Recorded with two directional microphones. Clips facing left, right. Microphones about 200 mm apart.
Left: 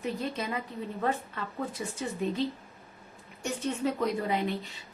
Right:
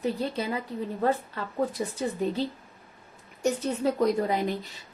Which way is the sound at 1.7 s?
35° right (ahead or behind).